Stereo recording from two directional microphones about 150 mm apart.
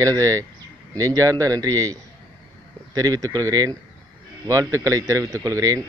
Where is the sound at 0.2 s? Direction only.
20° right (ahead or behind).